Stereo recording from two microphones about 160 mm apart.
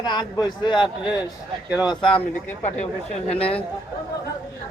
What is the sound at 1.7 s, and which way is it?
Speech, 25° left (ahead or behind).